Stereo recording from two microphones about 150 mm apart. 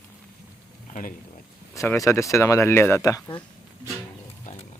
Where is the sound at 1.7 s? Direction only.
20° left (ahead or behind).